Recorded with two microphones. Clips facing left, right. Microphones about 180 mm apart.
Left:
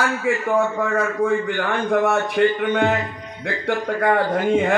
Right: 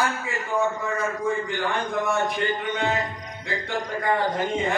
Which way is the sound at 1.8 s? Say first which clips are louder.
Left 6 dB; 70° left (ahead or behind).